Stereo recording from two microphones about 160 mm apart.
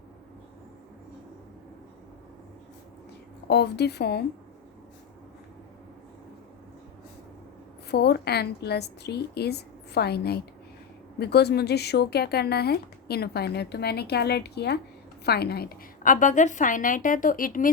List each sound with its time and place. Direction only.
3.5 s speech: 90° left
7.9 s a woman's voice: 90° left; by 17.7 s 60° left (ahead or behind)